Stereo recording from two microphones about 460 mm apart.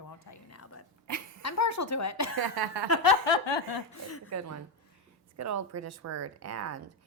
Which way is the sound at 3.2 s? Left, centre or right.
Left.